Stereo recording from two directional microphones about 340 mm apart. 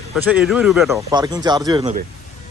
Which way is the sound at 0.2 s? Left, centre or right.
Centre.